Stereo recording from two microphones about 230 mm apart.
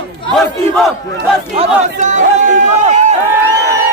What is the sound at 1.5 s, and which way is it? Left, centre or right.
Speech, right.